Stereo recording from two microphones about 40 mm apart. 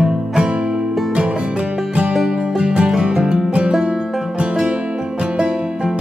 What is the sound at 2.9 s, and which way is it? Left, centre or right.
Music, centre.